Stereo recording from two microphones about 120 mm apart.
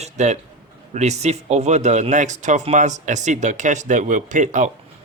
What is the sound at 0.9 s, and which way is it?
Speech, 70° right (ahead or behind).